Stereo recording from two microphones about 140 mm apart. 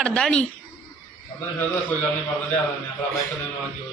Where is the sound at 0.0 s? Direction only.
5° left (ahead or behind).